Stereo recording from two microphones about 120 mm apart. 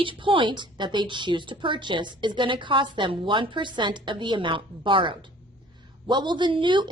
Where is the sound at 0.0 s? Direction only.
45° right (ahead or behind).